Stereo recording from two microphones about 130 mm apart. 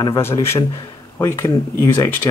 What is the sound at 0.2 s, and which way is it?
Speech, 20° left (ahead or behind).